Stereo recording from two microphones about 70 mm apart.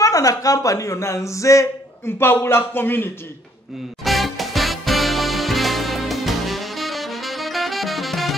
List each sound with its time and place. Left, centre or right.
0.0 s speech: left
4.0 s music: centre